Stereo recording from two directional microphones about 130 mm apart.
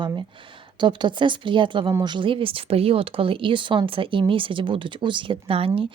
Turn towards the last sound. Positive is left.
turn(degrees=-45)  # may be behind; listen again after turning